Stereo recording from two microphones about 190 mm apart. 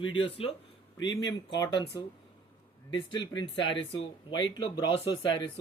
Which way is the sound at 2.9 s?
25° left (ahead or behind).